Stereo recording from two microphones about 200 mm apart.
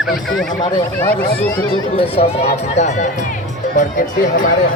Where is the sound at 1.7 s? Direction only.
30° left (ahead or behind).